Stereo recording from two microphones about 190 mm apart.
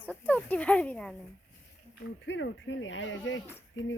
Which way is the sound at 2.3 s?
75° left (ahead or behind).